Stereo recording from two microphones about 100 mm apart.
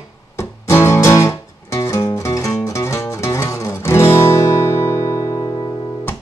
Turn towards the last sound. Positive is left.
turn(degrees=40)  # may be behind; listen again after turning